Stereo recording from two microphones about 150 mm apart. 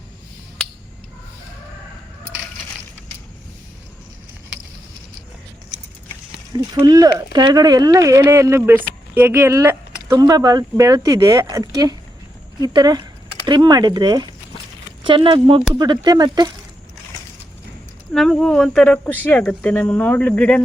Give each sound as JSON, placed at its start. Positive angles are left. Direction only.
{"t": 6.7, "sound": "speech", "side_deg": -25}
{"t": 18.1, "sound": "speech", "side_deg": 5}